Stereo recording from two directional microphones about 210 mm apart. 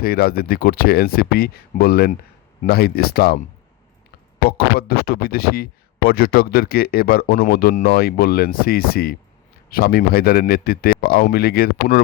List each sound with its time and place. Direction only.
0.0 s speech: 45° left (ahead or behind)
4.4 s speech: 45° left (ahead or behind)